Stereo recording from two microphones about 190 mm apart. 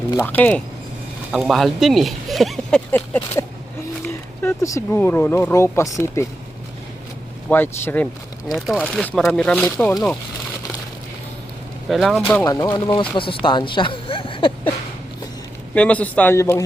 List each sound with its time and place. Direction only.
0.2 s speech: 10° left (ahead or behind)
4.4 s speech: 15° left (ahead or behind)
7.5 s speech: 10° left (ahead or behind)
8.5 s speech: centre (ahead or behind)
11.9 s speech: centre (ahead or behind)
12.4 s speech: 15° left (ahead or behind)
15.7 s speech: 5° left (ahead or behind)